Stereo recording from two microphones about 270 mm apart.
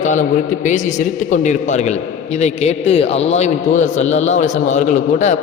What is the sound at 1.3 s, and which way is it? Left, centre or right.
A man's voice, left.